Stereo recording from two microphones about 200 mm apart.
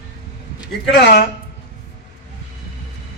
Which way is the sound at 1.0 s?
55° left (ahead or behind).